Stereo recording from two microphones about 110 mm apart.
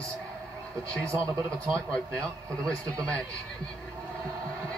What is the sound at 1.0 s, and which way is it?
Speech, 25° right (ahead or behind).